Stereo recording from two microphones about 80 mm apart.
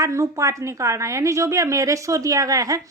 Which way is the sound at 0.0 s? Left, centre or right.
Right.